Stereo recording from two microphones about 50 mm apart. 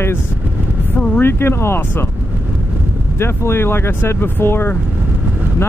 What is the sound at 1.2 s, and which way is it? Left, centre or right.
Speech, left.